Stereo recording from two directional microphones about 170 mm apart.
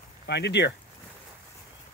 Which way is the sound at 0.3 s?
85° left.